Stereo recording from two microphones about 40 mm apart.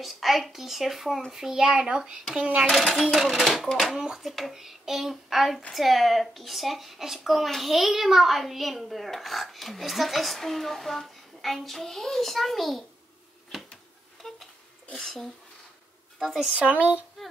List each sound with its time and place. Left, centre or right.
0.0 s a child's voice: centre
1.6 s a child's voice: right
2.7 s a child's voice: centre
3.8 s a child's voice: centre
14.2 s a sound: centre
16.2 s a child's voice: centre
16.5 s speech: right